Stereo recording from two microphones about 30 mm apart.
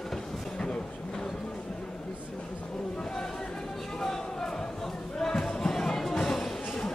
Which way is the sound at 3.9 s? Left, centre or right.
Centre.